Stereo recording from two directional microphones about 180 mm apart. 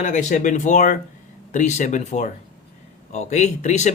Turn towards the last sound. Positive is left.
turn(degrees=40)  # may be behind; listen again after turning